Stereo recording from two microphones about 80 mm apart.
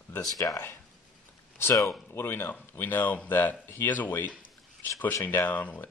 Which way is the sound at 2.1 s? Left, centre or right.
Left.